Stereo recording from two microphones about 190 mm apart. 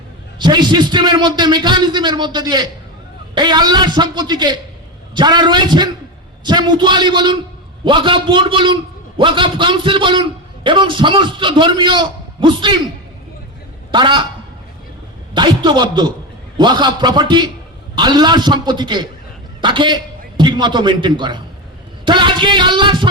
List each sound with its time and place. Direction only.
0.3 s a man's voice: 25° right (ahead or behind)
13.9 s a man's voice: 25° right (ahead or behind)
15.4 s a man's voice: 25° right (ahead or behind)